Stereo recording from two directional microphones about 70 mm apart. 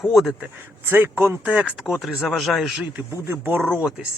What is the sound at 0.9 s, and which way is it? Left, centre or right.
Speech, right.